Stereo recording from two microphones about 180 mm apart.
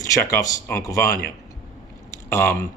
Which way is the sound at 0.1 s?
15° left (ahead or behind).